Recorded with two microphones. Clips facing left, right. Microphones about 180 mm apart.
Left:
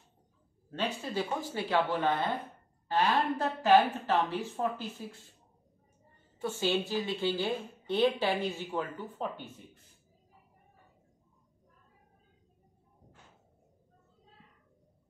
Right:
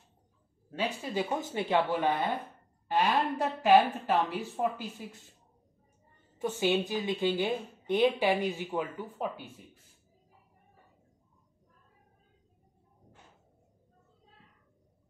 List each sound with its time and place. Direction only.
0.7 s a woman's voice: 10° right (ahead or behind)
6.4 s a woman's voice: 15° right (ahead or behind)